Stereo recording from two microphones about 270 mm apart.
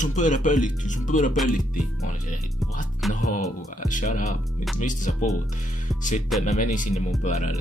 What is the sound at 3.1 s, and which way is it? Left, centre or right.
Speech, left.